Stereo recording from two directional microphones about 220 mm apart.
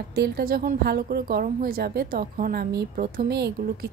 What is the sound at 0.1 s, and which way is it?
A woman's voice, 45° right (ahead or behind).